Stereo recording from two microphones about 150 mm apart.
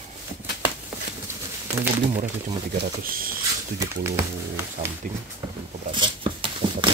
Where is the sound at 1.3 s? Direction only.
15° right (ahead or behind).